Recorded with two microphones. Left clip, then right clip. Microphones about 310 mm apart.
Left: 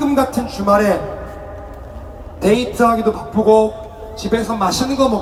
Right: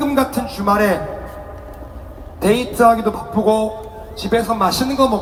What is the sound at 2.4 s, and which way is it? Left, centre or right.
Speech, centre.